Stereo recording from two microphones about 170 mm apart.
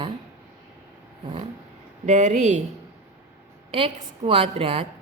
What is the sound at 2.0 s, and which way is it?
Speech, 45° right (ahead or behind).